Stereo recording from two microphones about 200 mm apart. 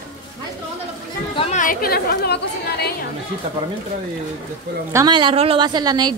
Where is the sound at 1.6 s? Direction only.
45° left (ahead or behind).